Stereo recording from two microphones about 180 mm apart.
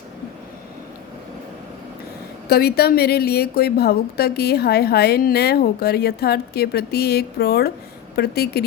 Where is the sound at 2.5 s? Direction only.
60° left (ahead or behind).